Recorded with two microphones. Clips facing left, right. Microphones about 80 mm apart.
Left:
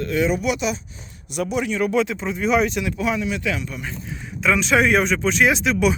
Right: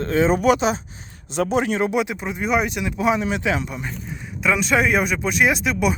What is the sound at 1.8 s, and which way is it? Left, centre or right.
Speech, centre.